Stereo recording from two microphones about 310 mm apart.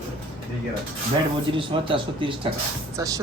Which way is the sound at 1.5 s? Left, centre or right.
Centre.